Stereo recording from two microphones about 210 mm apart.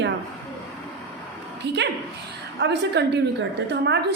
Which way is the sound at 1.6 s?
55° right (ahead or behind).